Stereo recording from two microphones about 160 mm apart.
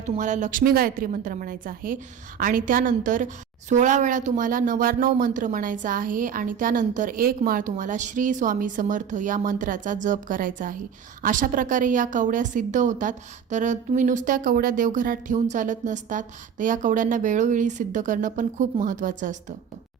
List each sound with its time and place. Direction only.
0.0 s speech: 50° right (ahead or behind)